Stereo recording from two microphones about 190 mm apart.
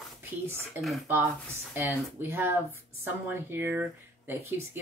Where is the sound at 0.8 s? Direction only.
Centre (ahead or behind).